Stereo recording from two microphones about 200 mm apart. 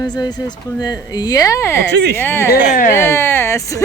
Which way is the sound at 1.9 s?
55° right (ahead or behind).